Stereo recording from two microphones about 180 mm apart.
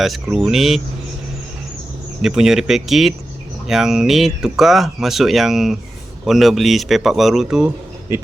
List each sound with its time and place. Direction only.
0.0 s speech: centre (ahead or behind)
2.2 s speech: 5° right (ahead or behind)